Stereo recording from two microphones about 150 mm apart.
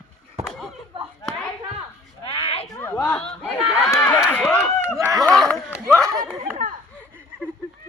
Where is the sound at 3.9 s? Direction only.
20° left (ahead or behind).